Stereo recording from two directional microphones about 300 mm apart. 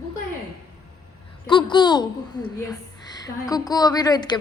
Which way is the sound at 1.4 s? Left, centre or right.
Centre.